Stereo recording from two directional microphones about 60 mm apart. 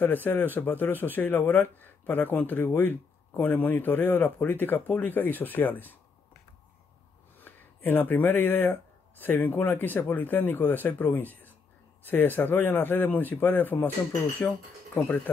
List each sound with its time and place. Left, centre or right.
0.0 s speech: left
7.3 s speech: left
14.4 s speech: left